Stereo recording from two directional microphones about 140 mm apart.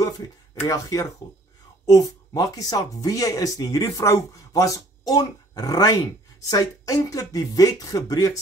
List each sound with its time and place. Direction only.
0.6 s speech: 25° left (ahead or behind)